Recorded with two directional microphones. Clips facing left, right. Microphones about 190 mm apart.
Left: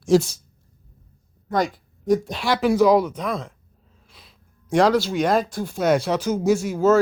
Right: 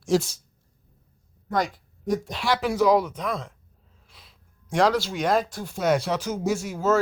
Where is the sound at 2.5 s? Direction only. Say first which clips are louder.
Left 4 dB; 15° left (ahead or behind).